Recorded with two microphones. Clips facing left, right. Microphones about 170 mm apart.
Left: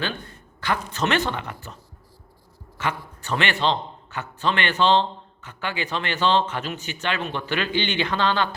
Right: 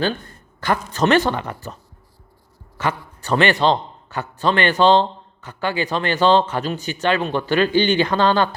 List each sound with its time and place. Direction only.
0.6 s a man's voice: 45° right (ahead or behind)
2.7 s a man's voice: 40° right (ahead or behind)